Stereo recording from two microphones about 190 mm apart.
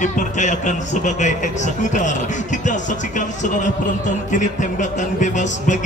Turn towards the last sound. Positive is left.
turn(degrees=40)  # may be behind; listen again after turning